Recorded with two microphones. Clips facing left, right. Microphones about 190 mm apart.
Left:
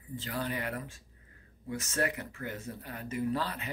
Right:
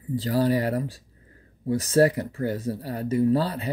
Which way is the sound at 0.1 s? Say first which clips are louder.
Right 13 dB; 35° right (ahead or behind).